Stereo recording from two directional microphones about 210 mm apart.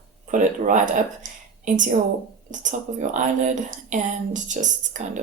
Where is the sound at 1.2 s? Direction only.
35° right (ahead or behind).